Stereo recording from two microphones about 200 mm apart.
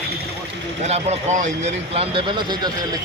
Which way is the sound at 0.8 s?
30° right (ahead or behind).